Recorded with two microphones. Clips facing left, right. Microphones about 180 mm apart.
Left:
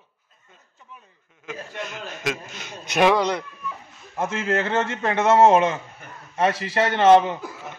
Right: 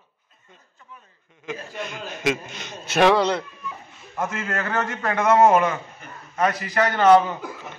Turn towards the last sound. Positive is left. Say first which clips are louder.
# left 1 dB
turn(degrees=25)  # may be behind; listen again after turning